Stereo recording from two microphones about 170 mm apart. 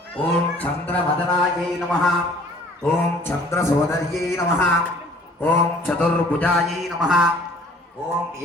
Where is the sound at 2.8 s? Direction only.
15° left (ahead or behind).